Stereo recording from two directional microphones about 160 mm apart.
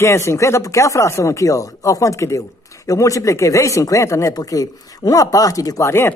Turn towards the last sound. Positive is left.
turn(degrees=15)  # may be behind; listen again after turning